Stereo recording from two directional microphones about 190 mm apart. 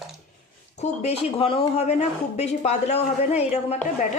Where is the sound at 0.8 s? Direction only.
35° left (ahead or behind).